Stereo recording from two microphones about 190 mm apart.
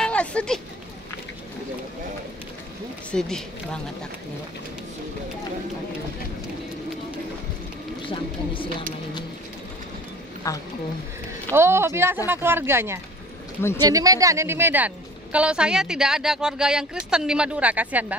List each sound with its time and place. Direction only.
0.0 s a sound: 5° left (ahead or behind)
3.1 s a woman's voice: 5° left (ahead or behind)
10.4 s a woman's voice: 15° left (ahead or behind)
11.5 s a woman's voice: 15° right (ahead or behind)